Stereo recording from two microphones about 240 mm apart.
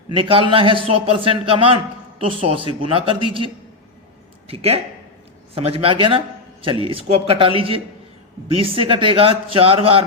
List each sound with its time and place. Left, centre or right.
0.1 s a man's voice: right